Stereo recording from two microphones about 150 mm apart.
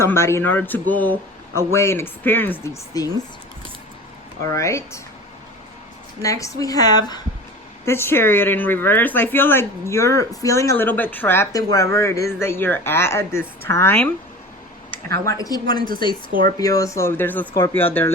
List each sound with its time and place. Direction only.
0.0 s speech: 15° left (ahead or behind)
2.9 s a woman's voice: 25° left (ahead or behind)
4.5 s a woman's voice: 20° left (ahead or behind)
6.2 s a woman's voice: 20° left (ahead or behind)
7.9 s speech: 15° left (ahead or behind)
15.4 s a woman's voice: 25° left (ahead or behind)